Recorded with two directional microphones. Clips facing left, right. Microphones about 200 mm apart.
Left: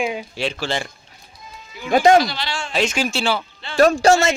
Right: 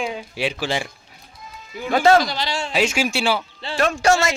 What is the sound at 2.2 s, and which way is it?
Speech, 40° right (ahead or behind).